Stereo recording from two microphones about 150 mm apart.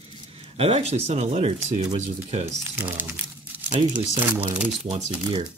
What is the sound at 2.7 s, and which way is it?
Crumpling, 15° right (ahead or behind).